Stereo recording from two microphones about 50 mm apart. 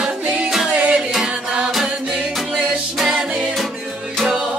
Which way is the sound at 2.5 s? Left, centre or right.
Centre.